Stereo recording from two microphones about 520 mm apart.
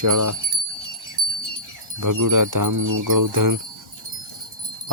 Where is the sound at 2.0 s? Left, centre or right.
Right.